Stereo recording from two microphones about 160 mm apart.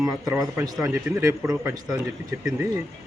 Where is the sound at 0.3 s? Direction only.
20° right (ahead or behind).